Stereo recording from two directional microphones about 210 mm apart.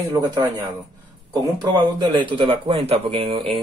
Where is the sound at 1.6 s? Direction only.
20° right (ahead or behind).